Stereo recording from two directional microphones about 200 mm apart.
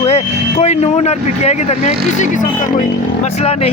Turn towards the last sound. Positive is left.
turn(degrees=30)  # may be behind; listen again after turning